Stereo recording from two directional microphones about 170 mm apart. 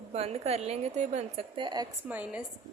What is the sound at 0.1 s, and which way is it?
A woman's voice, 40° right (ahead or behind).